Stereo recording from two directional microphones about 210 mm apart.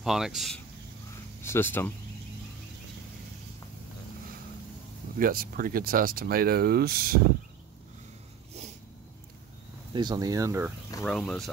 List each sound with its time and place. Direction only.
0.0 s speech: centre (ahead or behind)
1.4 s speech: 10° left (ahead or behind)
5.2 s speech: 45° right (ahead or behind)
9.9 s speech: 20° right (ahead or behind)
11.1 s speech: centre (ahead or behind)